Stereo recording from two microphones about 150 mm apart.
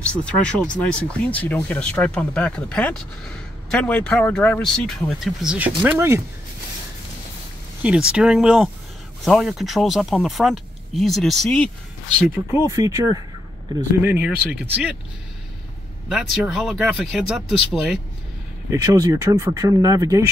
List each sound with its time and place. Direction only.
0.1 s speech: 10° left (ahead or behind); by 6.2 s 15° right (ahead or behind)
7.8 s speech: 5° right (ahead or behind)
12.3 s speech: 15° right (ahead or behind)
16.1 s speech: 5° right (ahead or behind)
18.7 s speech: 25° right (ahead or behind)